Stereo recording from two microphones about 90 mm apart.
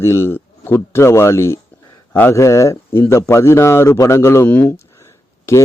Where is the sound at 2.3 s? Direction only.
35° left (ahead or behind).